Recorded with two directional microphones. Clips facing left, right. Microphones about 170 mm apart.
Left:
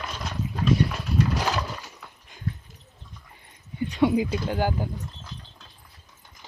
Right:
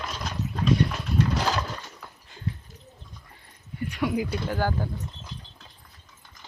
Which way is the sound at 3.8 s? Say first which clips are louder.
Left 5 dB; 25° left (ahead or behind).